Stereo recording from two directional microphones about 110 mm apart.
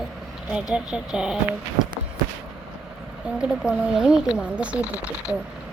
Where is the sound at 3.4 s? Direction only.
5° right (ahead or behind).